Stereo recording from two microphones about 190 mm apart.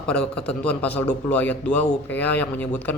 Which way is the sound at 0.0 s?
5° left (ahead or behind).